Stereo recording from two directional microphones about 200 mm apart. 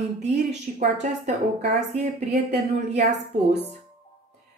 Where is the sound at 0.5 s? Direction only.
35° right (ahead or behind).